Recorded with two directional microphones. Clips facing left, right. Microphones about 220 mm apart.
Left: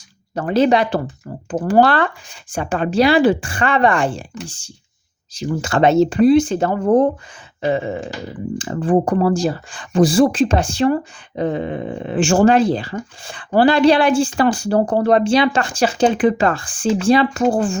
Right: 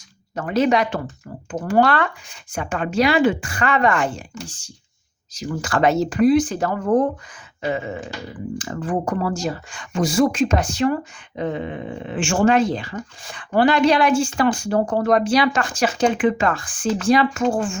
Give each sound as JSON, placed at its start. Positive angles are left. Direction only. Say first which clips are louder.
{"t": 0.3, "sound": "speech", "louder": "left 3 dB", "side_deg": 30}